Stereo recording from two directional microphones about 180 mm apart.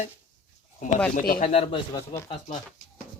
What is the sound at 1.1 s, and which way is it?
Speech, 50° left (ahead or behind).